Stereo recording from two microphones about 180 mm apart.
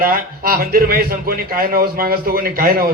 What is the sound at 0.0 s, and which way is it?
A man's voice, 55° right (ahead or behind).